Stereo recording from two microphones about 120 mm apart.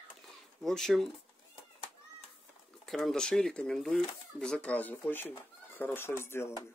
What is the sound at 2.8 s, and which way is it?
Speech, 5° left (ahead or behind).